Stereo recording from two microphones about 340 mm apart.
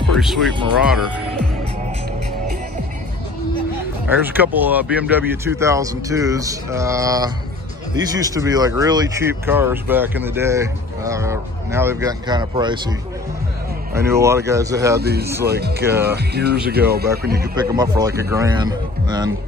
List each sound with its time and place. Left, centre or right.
0.2 s speech: centre
4.1 s speech: centre
13.9 s speech: centre
15.0 s speech: right
17.6 s speech: centre